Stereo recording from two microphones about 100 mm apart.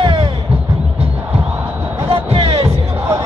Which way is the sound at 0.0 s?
60° right (ahead or behind).